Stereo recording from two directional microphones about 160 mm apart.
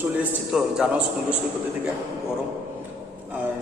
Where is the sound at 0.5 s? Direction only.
5° right (ahead or behind).